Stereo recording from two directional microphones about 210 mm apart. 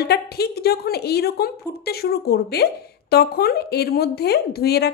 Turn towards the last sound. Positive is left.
turn(degrees=50)  # may be behind; listen again after turning